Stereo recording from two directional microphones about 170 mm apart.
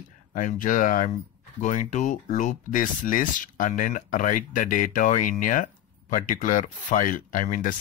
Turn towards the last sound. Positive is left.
turn(degrees=50)  # may be behind; listen again after turning